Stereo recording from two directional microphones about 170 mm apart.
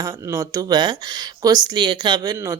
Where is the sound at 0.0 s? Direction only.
15° right (ahead or behind).